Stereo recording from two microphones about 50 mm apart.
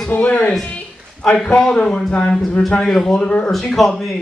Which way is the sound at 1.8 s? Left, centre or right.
Centre.